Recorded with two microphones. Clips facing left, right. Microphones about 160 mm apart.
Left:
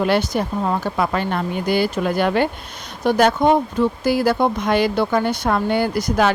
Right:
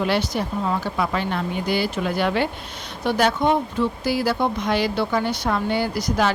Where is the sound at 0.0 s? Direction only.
50° left (ahead or behind).